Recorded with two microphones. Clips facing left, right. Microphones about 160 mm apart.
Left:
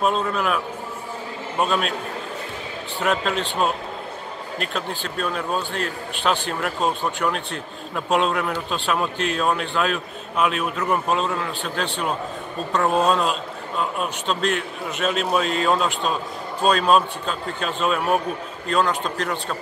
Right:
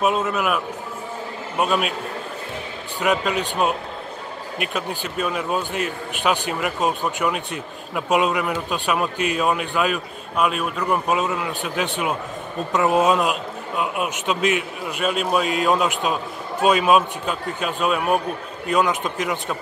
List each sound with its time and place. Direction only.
0.0 s a man's voice: 5° right (ahead or behind)
1.6 s a man's voice: 5° right (ahead or behind)
3.0 s a man's voice: centre (ahead or behind)
4.6 s a man's voice: 10° right (ahead or behind)
18.7 s a man's voice: 15° right (ahead or behind)